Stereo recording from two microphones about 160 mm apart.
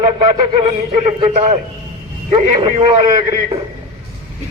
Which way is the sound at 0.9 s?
45° right (ahead or behind).